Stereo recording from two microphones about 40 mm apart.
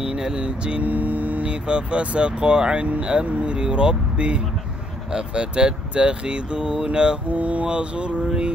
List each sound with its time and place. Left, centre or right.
0.0 s speech: right
0.8 s vehicle: right
1.5 s speech: right
3.3 s speech: right
3.5 s speech: right
7.2 s speech: right